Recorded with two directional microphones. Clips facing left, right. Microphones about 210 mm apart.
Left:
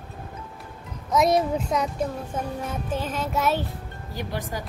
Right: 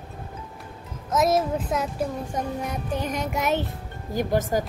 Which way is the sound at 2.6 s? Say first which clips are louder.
Right 1 dB; 15° right (ahead or behind).